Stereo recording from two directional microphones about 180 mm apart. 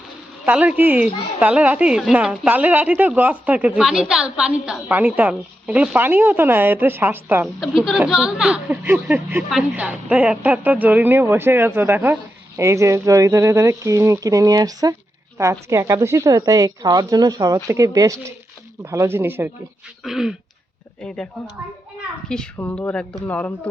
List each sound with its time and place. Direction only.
0.4 s speech: 10° right (ahead or behind)
7.4 s speech: centre (ahead or behind)